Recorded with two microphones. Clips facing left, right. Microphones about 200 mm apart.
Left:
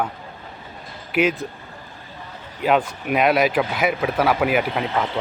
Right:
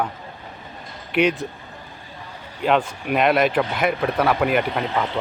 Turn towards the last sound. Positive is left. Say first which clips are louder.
# even
turn(degrees=0)  # may be behind; listen again after turning